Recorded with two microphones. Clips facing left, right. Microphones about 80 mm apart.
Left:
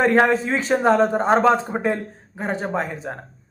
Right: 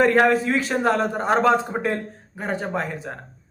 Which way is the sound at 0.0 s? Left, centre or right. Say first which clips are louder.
Even; centre.